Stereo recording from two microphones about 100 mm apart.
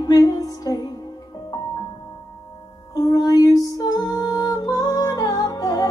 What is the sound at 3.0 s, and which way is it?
Music, 35° left (ahead or behind).